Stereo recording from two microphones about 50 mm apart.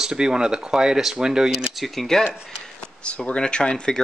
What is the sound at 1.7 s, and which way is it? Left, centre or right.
Speech, centre.